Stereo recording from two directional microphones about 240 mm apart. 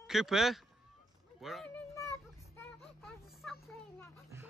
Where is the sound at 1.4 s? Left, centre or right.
Centre.